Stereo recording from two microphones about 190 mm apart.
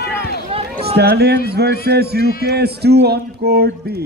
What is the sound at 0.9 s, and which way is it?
A man's voice, 60° right (ahead or behind).